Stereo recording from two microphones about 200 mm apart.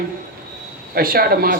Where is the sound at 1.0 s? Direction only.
50° right (ahead or behind).